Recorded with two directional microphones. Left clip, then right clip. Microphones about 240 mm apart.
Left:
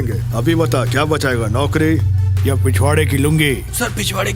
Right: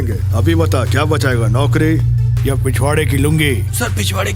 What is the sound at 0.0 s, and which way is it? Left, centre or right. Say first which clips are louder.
Speech: even; centre.